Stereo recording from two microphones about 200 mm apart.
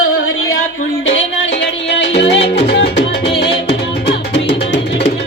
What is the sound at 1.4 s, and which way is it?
Music, 65° left (ahead or behind).